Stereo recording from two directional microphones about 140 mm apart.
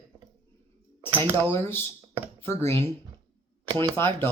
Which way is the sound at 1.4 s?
15° left (ahead or behind).